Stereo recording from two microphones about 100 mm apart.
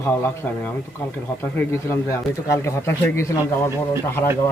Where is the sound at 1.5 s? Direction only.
30° left (ahead or behind).